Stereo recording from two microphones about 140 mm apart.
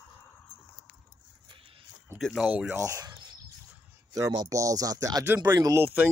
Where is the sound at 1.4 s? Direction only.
40° right (ahead or behind).